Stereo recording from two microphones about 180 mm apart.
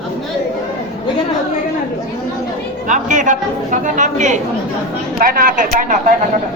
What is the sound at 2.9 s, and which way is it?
A man's voice, 45° right (ahead or behind).